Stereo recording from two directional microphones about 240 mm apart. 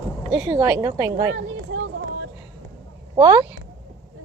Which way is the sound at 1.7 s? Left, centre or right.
Right.